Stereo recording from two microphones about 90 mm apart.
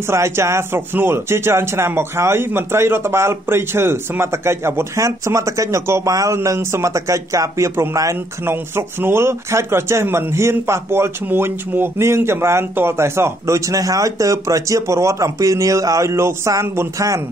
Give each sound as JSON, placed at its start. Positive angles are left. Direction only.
{"t": 0.1, "sound": "speech", "side_deg": -30}